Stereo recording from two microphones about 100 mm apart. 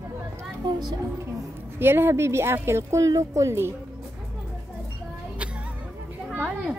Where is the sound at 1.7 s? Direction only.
25° right (ahead or behind).